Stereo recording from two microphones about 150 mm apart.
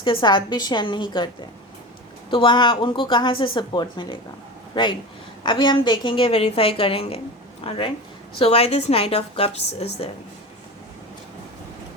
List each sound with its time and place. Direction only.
0.0 s a woman's voice: 35° left (ahead or behind)
2.3 s a woman's voice: 35° left (ahead or behind)